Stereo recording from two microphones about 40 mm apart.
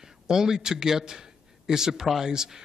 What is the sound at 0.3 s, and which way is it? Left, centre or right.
A man's voice, centre.